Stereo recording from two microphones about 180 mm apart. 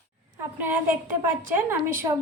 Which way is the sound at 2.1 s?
20° right (ahead or behind).